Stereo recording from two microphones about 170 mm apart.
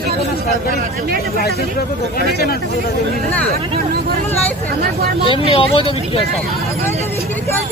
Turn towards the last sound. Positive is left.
turn(degrees=30)  # may be behind; listen again after turning